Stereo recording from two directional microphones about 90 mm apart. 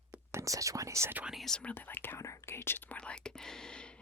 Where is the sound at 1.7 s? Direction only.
20° left (ahead or behind).